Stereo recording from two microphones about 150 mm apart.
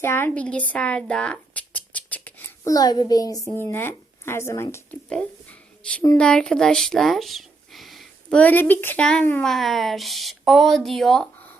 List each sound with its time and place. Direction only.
0.0 s speech: 15° left (ahead or behind)
2.6 s a child's voice: 25° left (ahead or behind)
5.0 s a sound: 5° left (ahead or behind)
6.1 s speech: 5° left (ahead or behind)